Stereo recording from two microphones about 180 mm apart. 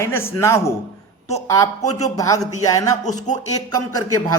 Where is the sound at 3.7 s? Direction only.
20° left (ahead or behind).